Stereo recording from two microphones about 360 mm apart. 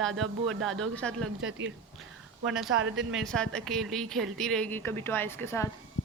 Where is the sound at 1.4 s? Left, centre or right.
Right.